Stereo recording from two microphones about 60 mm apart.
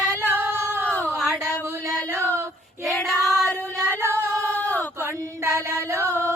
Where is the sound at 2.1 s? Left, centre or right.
Left.